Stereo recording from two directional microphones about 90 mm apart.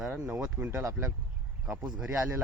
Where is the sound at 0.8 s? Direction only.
35° right (ahead or behind).